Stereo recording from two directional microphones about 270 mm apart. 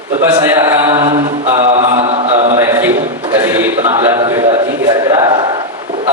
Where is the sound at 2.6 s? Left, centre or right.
Centre.